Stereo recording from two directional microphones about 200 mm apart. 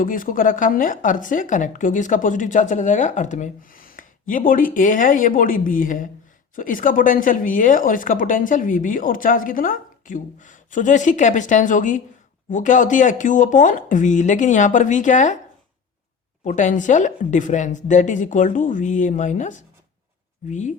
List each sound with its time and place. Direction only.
0.0 s speech: 45° left (ahead or behind)
16.4 s speech: 35° left (ahead or behind)